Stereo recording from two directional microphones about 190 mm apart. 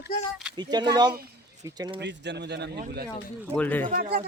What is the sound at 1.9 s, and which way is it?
Speech, 65° right (ahead or behind).